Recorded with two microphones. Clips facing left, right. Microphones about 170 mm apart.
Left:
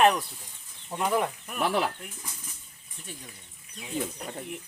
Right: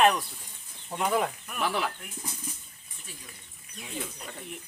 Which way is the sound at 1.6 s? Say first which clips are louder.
Left 3 dB; 35° left (ahead or behind).